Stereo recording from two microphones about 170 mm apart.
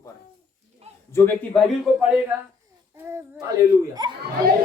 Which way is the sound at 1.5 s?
Centre (ahead or behind).